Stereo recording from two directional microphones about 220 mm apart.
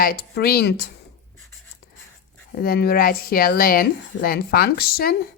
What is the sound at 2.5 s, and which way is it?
Speech, 45° left (ahead or behind).